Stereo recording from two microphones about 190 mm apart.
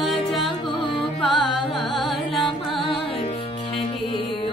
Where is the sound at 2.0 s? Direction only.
Centre (ahead or behind).